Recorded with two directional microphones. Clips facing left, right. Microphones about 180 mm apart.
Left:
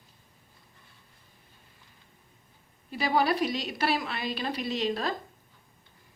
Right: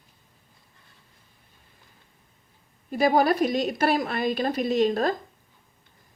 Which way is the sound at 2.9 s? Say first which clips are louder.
Right 6 dB; 50° right (ahead or behind).